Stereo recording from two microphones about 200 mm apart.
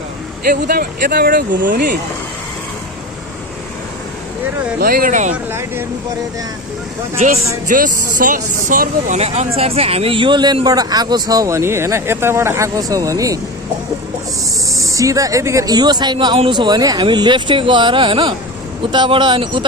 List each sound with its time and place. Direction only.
0.5 s speech: 50° right (ahead or behind)
4.7 s speech: 50° right (ahead or behind)
5.3 s speech: 10° right (ahead or behind)
7.2 s speech: 40° right (ahead or behind); by 13.4 s 15° right (ahead or behind)
14.7 s speech: 15° right (ahead or behind)